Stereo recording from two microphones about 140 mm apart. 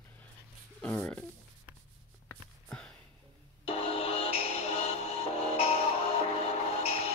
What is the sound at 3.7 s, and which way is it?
Music, 45° left (ahead or behind).